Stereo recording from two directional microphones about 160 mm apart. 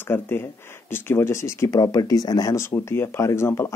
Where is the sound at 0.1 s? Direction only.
15° left (ahead or behind).